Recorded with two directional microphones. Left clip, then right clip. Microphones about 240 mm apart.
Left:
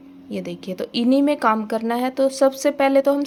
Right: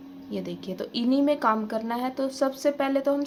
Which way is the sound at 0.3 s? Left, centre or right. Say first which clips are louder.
Left 5 dB; left.